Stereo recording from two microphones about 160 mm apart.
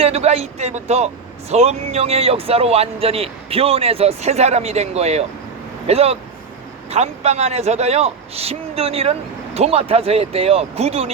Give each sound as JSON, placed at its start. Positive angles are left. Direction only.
{"t": 0.0, "sound": "speech", "side_deg": -40}